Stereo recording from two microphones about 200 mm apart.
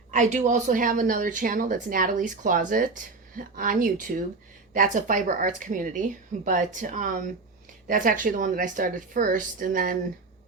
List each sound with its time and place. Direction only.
0.1 s a woman's voice: 35° right (ahead or behind)